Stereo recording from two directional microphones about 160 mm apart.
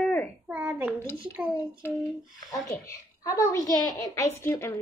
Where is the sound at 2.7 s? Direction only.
20° left (ahead or behind).